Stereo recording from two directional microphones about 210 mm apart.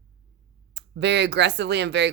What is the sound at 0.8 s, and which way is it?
Speech, 55° right (ahead or behind).